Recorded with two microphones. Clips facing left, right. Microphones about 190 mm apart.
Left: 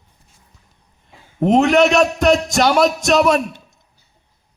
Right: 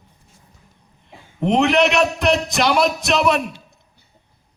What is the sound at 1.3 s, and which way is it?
A man's voice, 45° left (ahead or behind).